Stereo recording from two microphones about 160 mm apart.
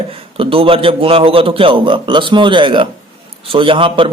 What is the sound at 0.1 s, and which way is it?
A man's voice, 35° right (ahead or behind).